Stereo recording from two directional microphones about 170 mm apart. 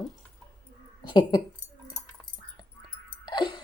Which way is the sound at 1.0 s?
25° left (ahead or behind).